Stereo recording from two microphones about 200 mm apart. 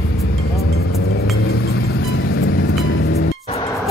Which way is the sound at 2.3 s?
55° left (ahead or behind).